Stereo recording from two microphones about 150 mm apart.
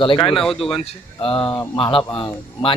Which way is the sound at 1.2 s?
35° left (ahead or behind).